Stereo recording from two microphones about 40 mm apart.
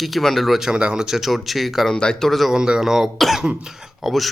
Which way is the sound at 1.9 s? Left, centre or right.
Left.